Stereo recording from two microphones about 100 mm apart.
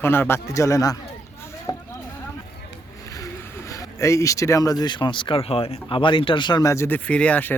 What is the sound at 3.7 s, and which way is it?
Speech, 30° left (ahead or behind).